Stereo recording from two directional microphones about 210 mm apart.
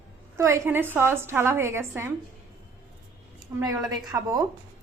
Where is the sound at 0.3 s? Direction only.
15° right (ahead or behind).